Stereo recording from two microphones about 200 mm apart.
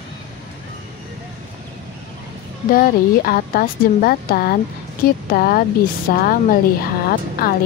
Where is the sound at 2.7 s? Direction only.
45° left (ahead or behind).